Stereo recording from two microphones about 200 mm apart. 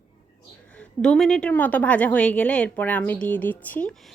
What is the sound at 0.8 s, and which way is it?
A woman's voice, 5° left (ahead or behind).